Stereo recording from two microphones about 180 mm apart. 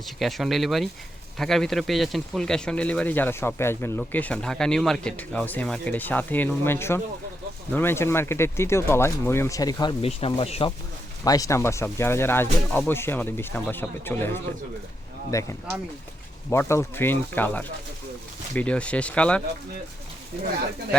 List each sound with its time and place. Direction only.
0.2 s speech: centre (ahead or behind); by 9.9 s 20° left (ahead or behind)
10.0 s speech: 35° left (ahead or behind)
11.2 s speech: 20° left (ahead or behind)